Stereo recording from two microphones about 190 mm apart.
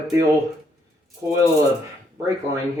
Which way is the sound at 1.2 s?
15° right (ahead or behind).